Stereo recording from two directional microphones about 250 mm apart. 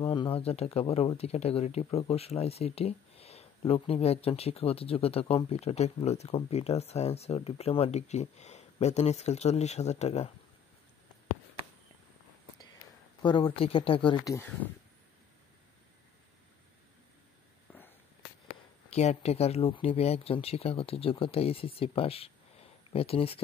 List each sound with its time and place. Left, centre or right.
0.0 s speech: centre
13.2 s speech: centre
18.9 s speech: left